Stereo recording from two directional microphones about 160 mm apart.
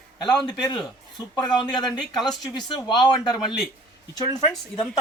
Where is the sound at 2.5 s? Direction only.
30° left (ahead or behind).